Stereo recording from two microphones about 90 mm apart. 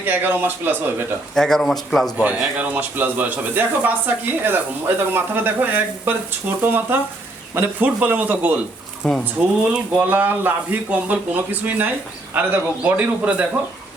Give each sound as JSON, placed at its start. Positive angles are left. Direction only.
{"t": 0.0, "sound": "speech", "side_deg": -20}
{"t": 1.4, "sound": "speech", "side_deg": 5}
{"t": 2.6, "sound": "speech", "side_deg": -20}
{"t": 9.0, "sound": "speech", "side_deg": 5}
{"t": 9.7, "sound": "a man's voice", "side_deg": -15}